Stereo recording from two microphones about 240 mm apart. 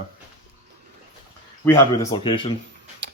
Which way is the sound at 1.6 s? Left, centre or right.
Centre.